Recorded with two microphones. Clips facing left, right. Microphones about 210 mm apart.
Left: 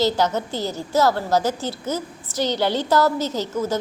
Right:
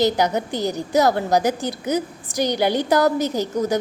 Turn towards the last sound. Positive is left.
turn(degrees=-15)  # may be behind; listen again after turning